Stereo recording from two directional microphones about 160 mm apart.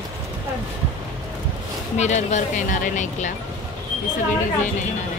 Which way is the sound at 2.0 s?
45° left (ahead or behind).